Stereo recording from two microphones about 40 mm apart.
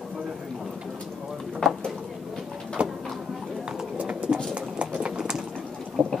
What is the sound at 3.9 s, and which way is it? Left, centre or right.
Bird, right.